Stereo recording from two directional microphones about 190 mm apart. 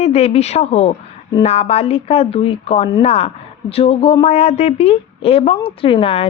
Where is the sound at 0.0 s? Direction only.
35° left (ahead or behind).